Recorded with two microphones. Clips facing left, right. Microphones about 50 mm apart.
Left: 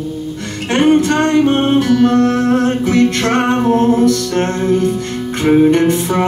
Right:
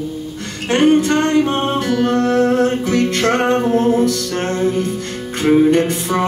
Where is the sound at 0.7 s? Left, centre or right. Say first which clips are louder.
Left 1 dB; left.